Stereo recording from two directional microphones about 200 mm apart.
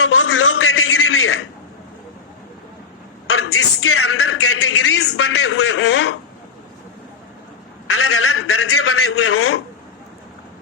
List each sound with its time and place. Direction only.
0.0 s a sound: 90° left
3.2 s speech: 90° left; by 6.1 s 65° left (ahead or behind)
7.9 s a man's voice: 90° left